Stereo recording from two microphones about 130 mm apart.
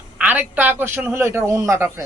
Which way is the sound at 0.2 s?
10° right (ahead or behind).